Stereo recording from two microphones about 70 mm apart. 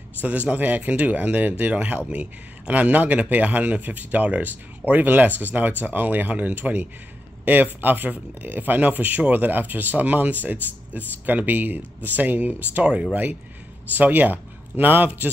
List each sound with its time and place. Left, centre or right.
0.2 s speech: right